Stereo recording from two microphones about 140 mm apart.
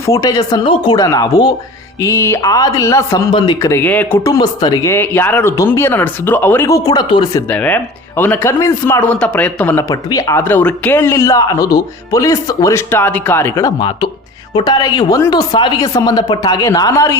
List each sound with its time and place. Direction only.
0.0 s speech: 25° left (ahead or behind)
3.3 s speech: 35° left (ahead or behind)
3.6 s speech: 15° left (ahead or behind)
4.2 s speech: 30° left (ahead or behind)
7.4 s speech: 10° left (ahead or behind)
9.9 s speech: 25° left (ahead or behind)